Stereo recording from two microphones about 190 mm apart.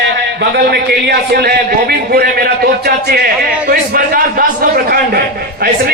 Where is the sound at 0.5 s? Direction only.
60° right (ahead or behind).